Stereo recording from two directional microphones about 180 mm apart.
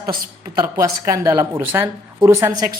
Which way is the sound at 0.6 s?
15° right (ahead or behind).